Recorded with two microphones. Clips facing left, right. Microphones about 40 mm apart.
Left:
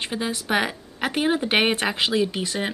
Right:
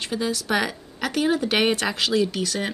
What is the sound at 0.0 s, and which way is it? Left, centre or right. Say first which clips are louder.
A woman's voice: right 1 dB; left.